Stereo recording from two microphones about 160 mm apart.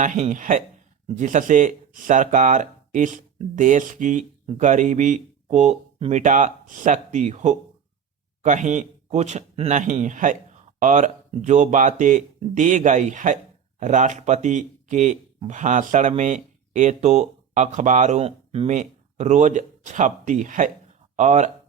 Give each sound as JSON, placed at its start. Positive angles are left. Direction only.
{"t": 0.0, "sound": "speech", "side_deg": -50}